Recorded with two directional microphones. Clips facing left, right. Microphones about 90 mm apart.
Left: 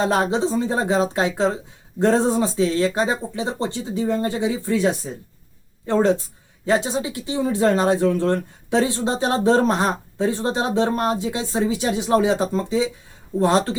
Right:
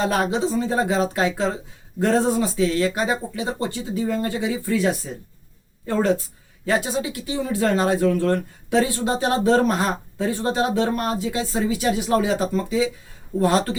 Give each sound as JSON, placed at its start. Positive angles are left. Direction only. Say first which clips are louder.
{"t": 0.0, "sound": "speech", "louder": "left 2 dB", "side_deg": 25}